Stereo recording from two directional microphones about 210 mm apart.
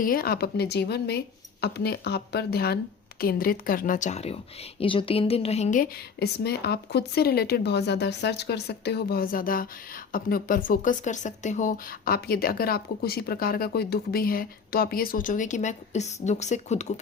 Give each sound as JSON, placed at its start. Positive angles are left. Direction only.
{"t": 0.0, "sound": "speech", "side_deg": 45}